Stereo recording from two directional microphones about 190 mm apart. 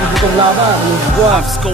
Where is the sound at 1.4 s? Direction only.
Centre (ahead or behind).